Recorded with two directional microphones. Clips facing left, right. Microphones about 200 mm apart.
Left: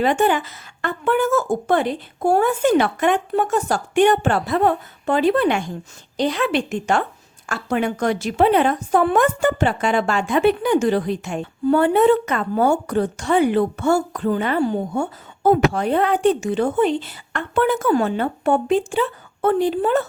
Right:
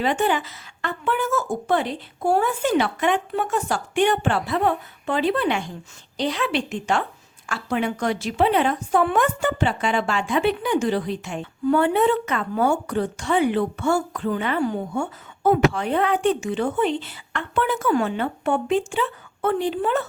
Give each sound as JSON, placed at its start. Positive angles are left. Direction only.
{"t": 0.0, "sound": "a woman's voice", "side_deg": 50}